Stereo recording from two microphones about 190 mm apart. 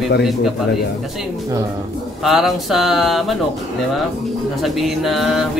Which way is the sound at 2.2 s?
Centre (ahead or behind).